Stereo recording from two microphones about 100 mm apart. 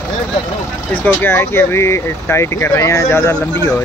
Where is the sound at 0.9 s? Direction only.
15° left (ahead or behind).